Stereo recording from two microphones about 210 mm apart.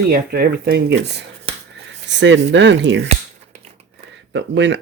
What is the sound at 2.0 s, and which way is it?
Speech, 60° right (ahead or behind).